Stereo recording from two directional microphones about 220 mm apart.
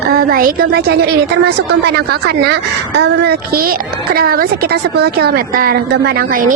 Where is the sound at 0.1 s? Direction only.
45° right (ahead or behind).